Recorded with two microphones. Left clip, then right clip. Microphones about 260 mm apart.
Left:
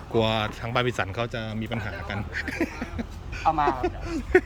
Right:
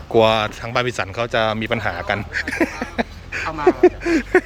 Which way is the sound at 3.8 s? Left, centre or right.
Centre.